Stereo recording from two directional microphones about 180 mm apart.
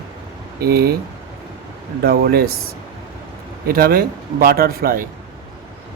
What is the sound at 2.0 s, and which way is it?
Speech, 60° right (ahead or behind).